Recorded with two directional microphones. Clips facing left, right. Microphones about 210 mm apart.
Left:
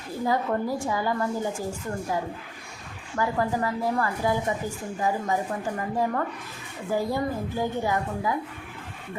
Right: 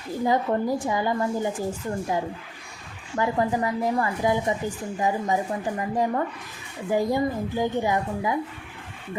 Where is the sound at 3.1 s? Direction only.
20° right (ahead or behind).